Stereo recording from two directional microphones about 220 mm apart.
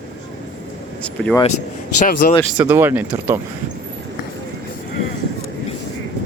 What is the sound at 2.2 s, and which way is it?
Speech, 45° left (ahead or behind).